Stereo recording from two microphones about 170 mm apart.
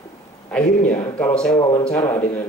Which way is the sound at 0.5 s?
5° left (ahead or behind).